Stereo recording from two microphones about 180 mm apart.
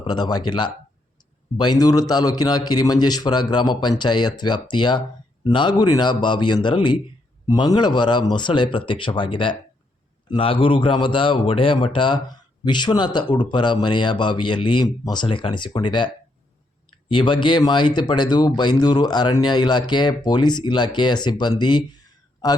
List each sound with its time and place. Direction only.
0.0 s speech: 25° left (ahead or behind)
17.1 s speech: 25° left (ahead or behind)